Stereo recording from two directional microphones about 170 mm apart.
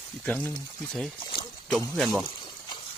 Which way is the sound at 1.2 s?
30° left (ahead or behind).